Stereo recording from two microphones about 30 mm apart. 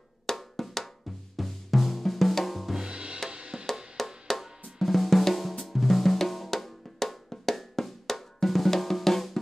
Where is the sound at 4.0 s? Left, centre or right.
Centre.